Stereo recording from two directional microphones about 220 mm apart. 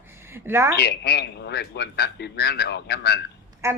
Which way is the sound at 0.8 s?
50° left (ahead or behind).